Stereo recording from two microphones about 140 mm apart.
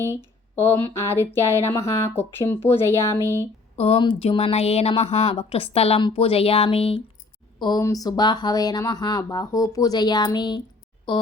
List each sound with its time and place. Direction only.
0.5 s speech: 15° left (ahead or behind)
3.8 s speech: 45° left (ahead or behind)
7.6 s speech: 25° left (ahead or behind)